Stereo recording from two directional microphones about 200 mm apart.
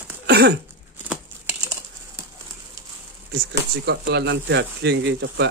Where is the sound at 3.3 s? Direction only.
55° right (ahead or behind).